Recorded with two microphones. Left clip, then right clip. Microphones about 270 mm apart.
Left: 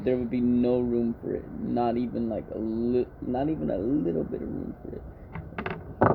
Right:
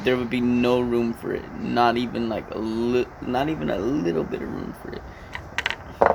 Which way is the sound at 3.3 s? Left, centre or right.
Right.